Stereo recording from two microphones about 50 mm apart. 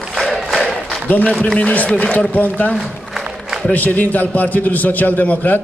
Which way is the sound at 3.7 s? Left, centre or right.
Left.